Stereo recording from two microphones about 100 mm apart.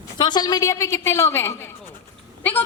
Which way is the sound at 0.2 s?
45° left (ahead or behind).